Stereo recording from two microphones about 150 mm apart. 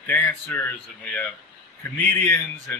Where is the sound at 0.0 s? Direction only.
15° left (ahead or behind).